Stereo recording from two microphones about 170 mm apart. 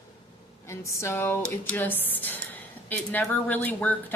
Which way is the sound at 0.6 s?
15° left (ahead or behind).